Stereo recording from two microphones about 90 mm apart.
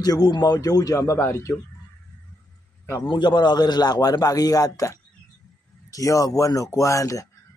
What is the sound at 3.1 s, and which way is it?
Speech, 55° left (ahead or behind).